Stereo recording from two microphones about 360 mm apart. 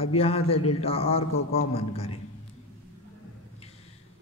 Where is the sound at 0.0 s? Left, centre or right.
Centre.